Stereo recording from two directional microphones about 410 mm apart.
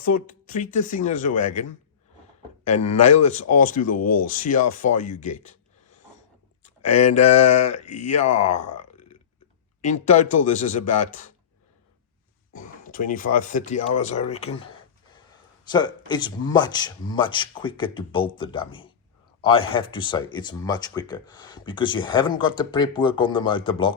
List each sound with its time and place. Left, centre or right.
0.0 s speech: centre
2.8 s speech: centre
7.0 s speech: centre
9.8 s speech: centre
12.5 s speech: centre